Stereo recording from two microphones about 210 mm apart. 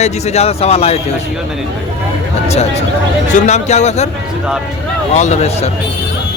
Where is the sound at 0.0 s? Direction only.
30° left (ahead or behind).